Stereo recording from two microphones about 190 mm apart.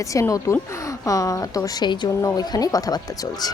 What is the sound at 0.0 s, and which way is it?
A child's voice, 15° left (ahead or behind).